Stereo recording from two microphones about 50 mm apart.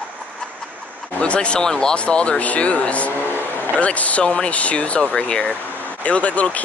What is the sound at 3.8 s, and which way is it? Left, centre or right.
Speech, left.